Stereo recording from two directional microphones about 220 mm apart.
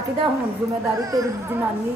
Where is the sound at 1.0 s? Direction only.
15° right (ahead or behind).